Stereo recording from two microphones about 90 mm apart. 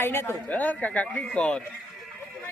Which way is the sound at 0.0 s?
30° left (ahead or behind).